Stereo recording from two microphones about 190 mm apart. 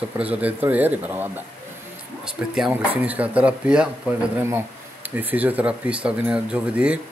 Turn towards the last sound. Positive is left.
turn(degrees=-5)  # may be behind; listen again after turning